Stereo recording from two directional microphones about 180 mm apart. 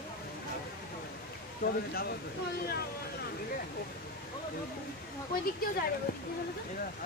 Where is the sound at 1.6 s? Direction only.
55° left (ahead or behind).